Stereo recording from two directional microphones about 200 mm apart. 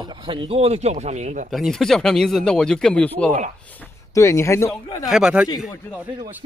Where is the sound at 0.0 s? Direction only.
25° right (ahead or behind).